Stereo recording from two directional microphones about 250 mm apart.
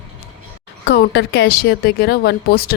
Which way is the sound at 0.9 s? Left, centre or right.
Left.